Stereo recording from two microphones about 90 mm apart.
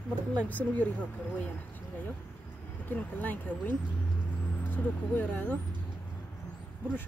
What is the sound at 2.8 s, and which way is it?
Speech, 20° left (ahead or behind).